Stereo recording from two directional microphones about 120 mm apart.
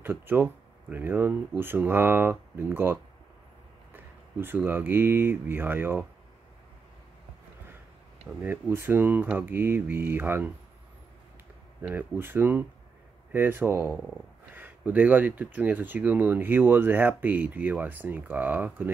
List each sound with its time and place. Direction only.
0.0 s speech: 15° right (ahead or behind)
8.4 s speech: 15° right (ahead or behind)
11.8 s speech: 15° right (ahead or behind)
13.9 s speech: centre (ahead or behind)
14.5 s speech: 15° right (ahead or behind)